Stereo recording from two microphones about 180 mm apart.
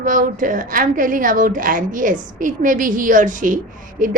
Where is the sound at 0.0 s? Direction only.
45° right (ahead or behind).